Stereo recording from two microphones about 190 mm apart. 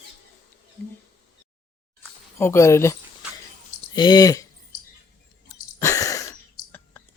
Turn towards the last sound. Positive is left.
turn(degrees=15)  # may be behind; listen again after turning